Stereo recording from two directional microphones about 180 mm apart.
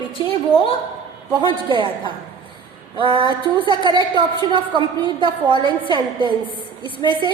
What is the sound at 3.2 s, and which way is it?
A woman's voice, 25° right (ahead or behind).